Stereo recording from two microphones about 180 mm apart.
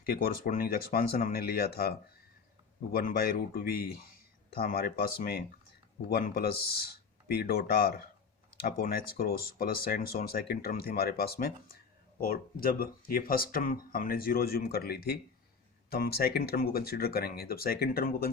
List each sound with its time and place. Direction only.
0.0 s speech: 50° left (ahead or behind)